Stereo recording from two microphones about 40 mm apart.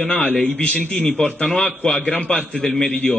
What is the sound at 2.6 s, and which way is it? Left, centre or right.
Speech, centre.